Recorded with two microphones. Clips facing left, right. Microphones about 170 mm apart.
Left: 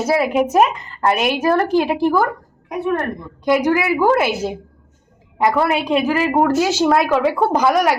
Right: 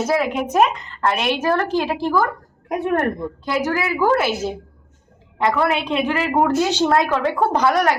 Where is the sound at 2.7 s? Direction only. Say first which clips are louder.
Right 1 dB; 55° right (ahead or behind).